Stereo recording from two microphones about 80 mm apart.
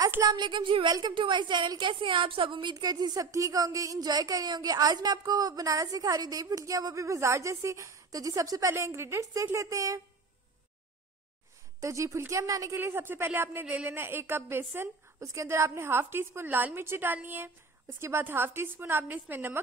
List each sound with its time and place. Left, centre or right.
0.2 s a woman's voice: right
1.8 s a woman's voice: right
11.8 s a woman's voice: right
12.7 s a woman's voice: right
13.7 s a woman's voice: centre
13.9 s a woman's voice: right